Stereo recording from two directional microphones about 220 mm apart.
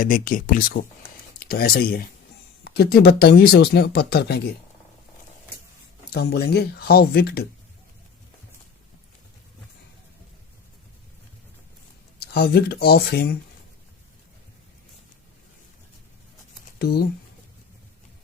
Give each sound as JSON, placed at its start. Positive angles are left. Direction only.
{"t": 0.0, "sound": "speech", "side_deg": 40}
{"t": 6.1, "sound": "speech", "side_deg": 45}
{"t": 12.2, "sound": "speech", "side_deg": 45}
{"t": 16.7, "sound": "speech", "side_deg": 45}